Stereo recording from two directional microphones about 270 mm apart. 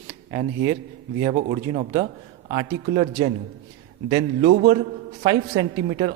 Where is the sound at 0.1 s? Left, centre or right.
Centre.